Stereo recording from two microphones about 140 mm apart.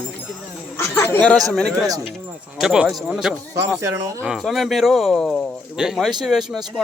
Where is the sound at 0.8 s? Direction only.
20° left (ahead or behind).